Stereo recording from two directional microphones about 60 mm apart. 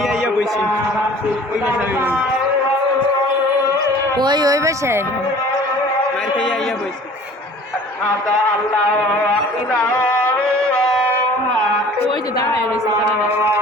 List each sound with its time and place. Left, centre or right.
4.4 s speech: right
9.9 s music: centre